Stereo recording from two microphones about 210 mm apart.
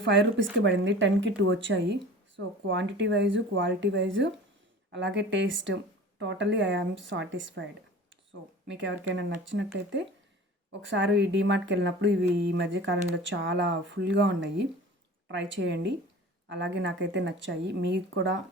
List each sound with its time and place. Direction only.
0.0 s speech: 60° right (ahead or behind)
10.7 s speech: 60° right (ahead or behind)